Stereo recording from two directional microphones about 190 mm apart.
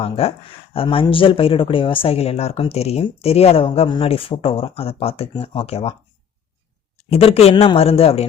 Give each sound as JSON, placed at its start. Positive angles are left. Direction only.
{"t": 0.0, "sound": "speech", "side_deg": 30}
{"t": 7.1, "sound": "speech", "side_deg": 30}